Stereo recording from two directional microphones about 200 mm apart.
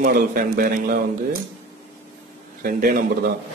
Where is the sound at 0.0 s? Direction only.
45° right (ahead or behind).